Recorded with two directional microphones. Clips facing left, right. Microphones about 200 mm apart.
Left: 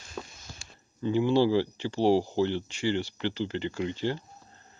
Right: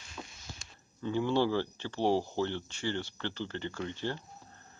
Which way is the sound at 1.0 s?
10° left (ahead or behind).